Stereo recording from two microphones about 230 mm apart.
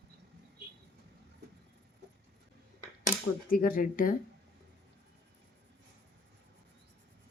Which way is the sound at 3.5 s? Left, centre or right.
Left.